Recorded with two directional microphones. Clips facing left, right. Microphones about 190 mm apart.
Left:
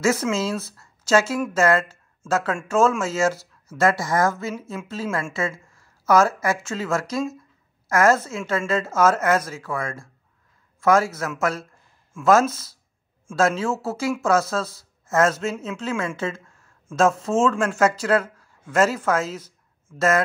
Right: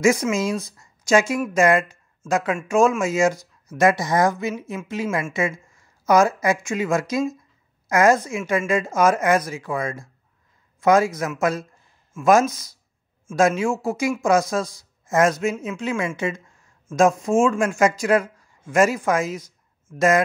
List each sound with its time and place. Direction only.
0.0 s speech: 15° right (ahead or behind)
16.2 s a sound: 15° right (ahead or behind)
16.9 s speech: 15° right (ahead or behind)